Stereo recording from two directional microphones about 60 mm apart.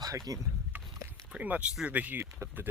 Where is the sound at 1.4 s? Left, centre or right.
Right.